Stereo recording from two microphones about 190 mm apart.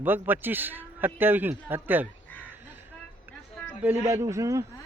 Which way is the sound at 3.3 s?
10° right (ahead or behind).